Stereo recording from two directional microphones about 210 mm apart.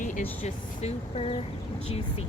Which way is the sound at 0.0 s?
40° left (ahead or behind).